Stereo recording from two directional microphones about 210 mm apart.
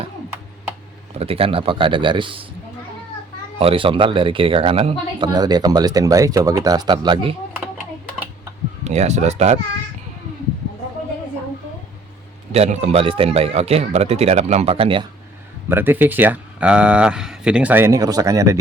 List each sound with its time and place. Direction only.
1.2 s speech: 25° right (ahead or behind)
3.6 s speech: 25° right (ahead or behind)
8.8 s a child's voice: 30° right (ahead or behind)
12.5 s speech: 30° right (ahead or behind)
15.7 s speech: 10° right (ahead or behind)